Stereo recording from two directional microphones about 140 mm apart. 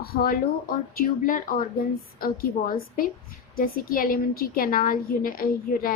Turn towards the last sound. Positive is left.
turn(degrees=90)